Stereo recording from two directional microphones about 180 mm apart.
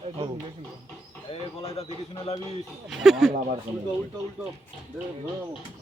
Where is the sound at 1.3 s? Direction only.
35° left (ahead or behind).